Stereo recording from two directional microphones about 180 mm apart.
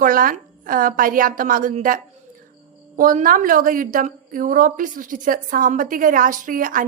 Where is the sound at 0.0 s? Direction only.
50° right (ahead or behind).